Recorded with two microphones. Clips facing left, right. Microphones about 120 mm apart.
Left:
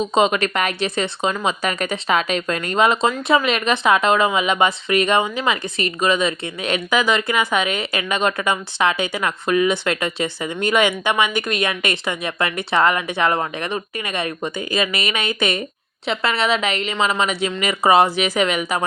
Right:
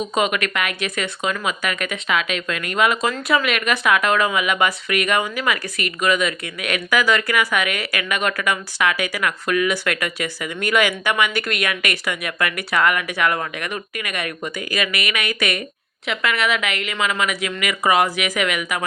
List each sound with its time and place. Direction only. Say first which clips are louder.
0.0 s speech: left 4 dB; 25° left (ahead or behind)